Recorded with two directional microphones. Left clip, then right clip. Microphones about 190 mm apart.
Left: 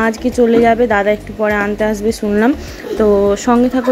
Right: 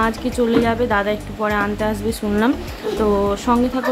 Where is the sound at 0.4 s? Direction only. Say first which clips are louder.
Left 7 dB; 20° left (ahead or behind).